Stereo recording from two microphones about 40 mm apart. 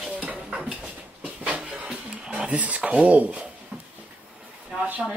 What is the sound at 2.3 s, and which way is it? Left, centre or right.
Speech, right.